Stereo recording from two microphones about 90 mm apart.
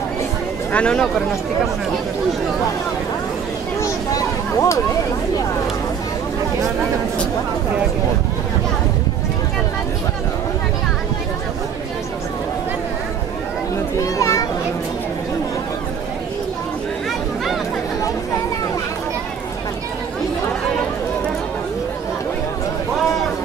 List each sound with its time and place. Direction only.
0.7 s speech: 10° left (ahead or behind)
3.8 s a sound: 40° left (ahead or behind)
13.9 s children playing: 35° left (ahead or behind)